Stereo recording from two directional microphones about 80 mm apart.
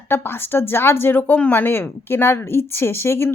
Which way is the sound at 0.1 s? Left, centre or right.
Left.